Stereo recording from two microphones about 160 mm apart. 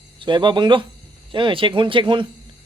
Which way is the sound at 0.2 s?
30° right (ahead or behind).